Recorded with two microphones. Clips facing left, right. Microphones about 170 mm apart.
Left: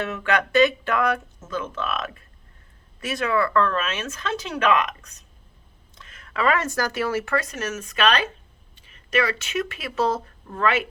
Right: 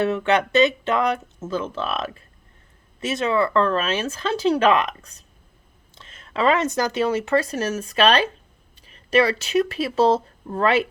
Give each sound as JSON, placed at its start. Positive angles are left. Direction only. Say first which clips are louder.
{"t": 0.0, "sound": "speech", "louder": "right 5 dB", "side_deg": -25}